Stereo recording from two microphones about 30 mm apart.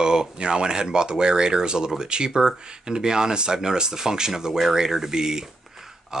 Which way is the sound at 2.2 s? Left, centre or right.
Centre.